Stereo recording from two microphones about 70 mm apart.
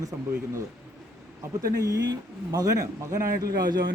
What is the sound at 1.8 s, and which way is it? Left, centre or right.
Speech, right.